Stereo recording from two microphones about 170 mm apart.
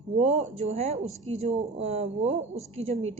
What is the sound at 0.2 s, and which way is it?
A woman's voice, 40° right (ahead or behind).